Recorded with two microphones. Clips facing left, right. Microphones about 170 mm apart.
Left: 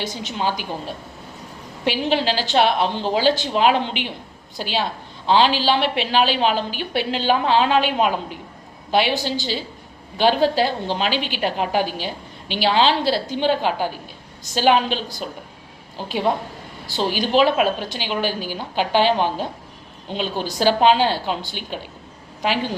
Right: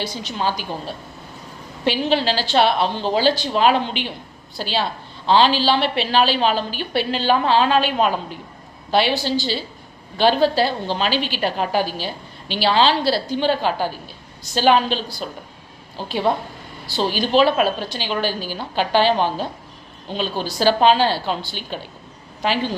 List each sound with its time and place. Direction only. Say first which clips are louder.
0.0 s a woman's voice: even; 20° left (ahead or behind)
1.8 s a woman's voice: right 1 dB; 15° left (ahead or behind)